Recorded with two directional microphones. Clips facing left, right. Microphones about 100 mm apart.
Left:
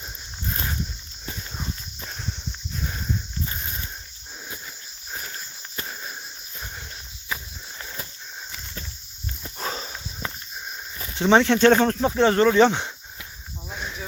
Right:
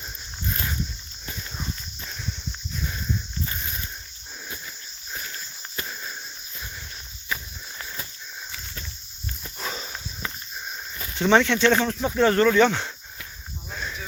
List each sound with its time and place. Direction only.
1.3 s horse: 30° left (ahead or behind)
3.4 s a sound: 25° left (ahead or behind)
5.1 s walk: 25° left (ahead or behind)
9.6 s walk: 35° left (ahead or behind)
10.2 s a sound: 35° left (ahead or behind)
10.9 s speech: 30° left (ahead or behind); by 12.0 s 45° left (ahead or behind)
12.0 s speech: 25° left (ahead or behind)
13.7 s snake: 20° left (ahead or behind)